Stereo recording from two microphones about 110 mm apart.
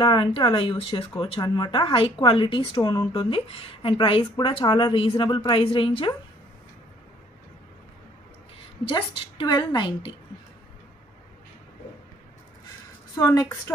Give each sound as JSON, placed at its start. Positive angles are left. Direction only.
{"t": 0.0, "sound": "speech", "side_deg": 50}
{"t": 8.8, "sound": "speech", "side_deg": 45}
{"t": 13.2, "sound": "a woman's voice", "side_deg": 35}